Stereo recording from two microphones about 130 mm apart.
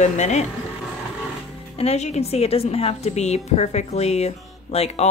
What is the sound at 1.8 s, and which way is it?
A woman's voice, 55° left (ahead or behind).